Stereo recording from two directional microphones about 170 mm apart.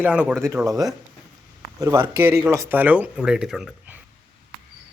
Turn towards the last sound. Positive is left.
turn(degrees=-5)  # may be behind; listen again after turning